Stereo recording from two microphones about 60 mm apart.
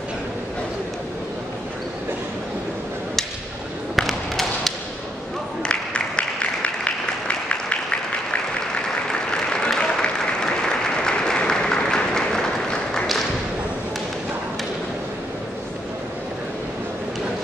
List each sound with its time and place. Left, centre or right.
3.9 s basketball bounce: centre
5.6 s applause: centre